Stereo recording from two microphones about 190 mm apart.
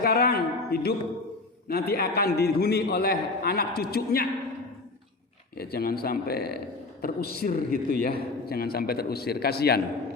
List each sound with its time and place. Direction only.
0.0 s a man's voice: 55° left (ahead or behind)
5.5 s a man's voice: 55° left (ahead or behind)